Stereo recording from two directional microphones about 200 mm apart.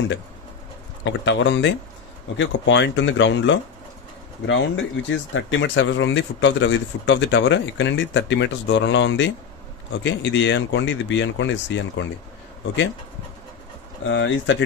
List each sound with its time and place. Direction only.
1.0 s speech: 65° left (ahead or behind)
14.0 s speech: 70° left (ahead or behind)